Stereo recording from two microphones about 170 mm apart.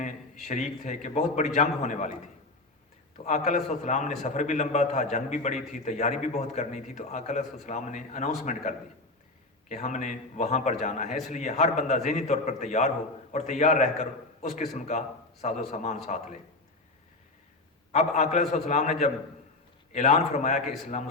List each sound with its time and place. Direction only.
0.4 s a man's voice: 45° left (ahead or behind)
9.6 s a man's voice: 45° left (ahead or behind)
17.9 s a man's voice: 45° left (ahead or behind)